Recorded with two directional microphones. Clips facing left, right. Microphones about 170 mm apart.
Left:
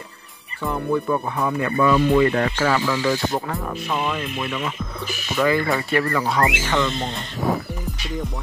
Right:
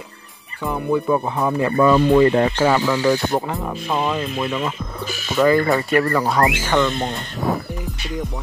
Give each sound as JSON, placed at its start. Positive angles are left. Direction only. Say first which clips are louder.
{"t": 0.7, "sound": "speech", "louder": "right 3 dB", "side_deg": -15}
{"t": 1.8, "sound": "speech", "louder": "right 3 dB", "side_deg": -35}
{"t": 3.4, "sound": "speech", "louder": "right 2 dB", "side_deg": -20}
{"t": 3.9, "sound": "speech", "louder": "right 4 dB", "side_deg": -35}